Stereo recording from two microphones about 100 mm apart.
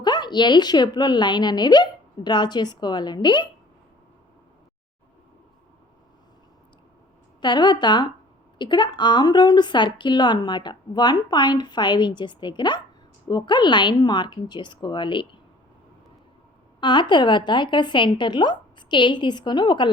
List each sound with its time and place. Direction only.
0.0 s a woman's voice: 45° left (ahead or behind)
7.4 s a woman's voice: 50° left (ahead or behind)
16.8 s a woman's voice: 50° left (ahead or behind)